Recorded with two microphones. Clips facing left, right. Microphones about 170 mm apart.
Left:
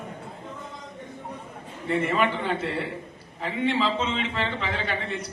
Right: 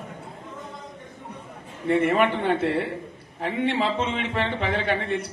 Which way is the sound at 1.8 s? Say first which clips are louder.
Right 4 dB; 55° right (ahead or behind).